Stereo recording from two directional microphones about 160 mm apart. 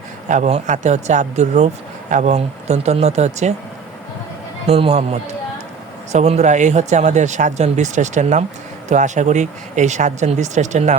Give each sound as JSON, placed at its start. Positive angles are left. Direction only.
{"t": 0.3, "sound": "speech", "side_deg": -45}
{"t": 4.6, "sound": "speech", "side_deg": -35}
{"t": 6.1, "sound": "speech", "side_deg": -45}